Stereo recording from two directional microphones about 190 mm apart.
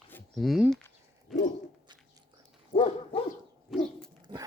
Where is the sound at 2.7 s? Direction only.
30° left (ahead or behind).